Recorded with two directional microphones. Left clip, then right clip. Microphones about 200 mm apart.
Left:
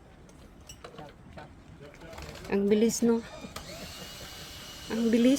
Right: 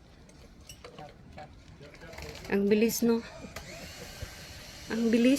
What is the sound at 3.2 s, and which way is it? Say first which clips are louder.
Mechanisms: left 1 dB; 60° left (ahead or behind).